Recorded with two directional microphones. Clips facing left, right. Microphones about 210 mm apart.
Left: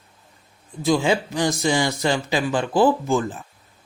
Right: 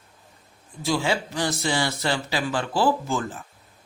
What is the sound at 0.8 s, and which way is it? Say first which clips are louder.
Speech: left 5 dB; 20° left (ahead or behind).